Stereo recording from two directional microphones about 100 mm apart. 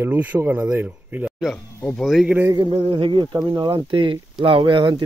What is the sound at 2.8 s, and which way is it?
Speech, 50° right (ahead or behind).